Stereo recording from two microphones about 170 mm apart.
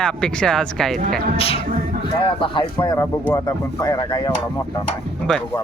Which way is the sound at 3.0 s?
15° left (ahead or behind).